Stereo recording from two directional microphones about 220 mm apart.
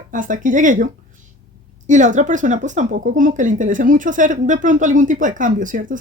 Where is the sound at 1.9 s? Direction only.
35° right (ahead or behind).